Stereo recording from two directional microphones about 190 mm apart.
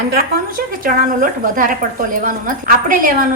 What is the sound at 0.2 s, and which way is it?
A woman's voice, 50° right (ahead or behind).